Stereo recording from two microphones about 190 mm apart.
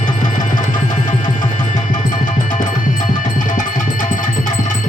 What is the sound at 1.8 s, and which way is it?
Music, 45° left (ahead or behind).